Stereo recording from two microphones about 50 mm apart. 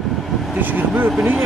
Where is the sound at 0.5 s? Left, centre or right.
Right.